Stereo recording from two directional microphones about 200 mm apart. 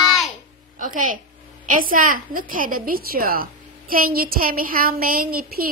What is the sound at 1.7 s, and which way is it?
A woman's voice, 45° right (ahead or behind).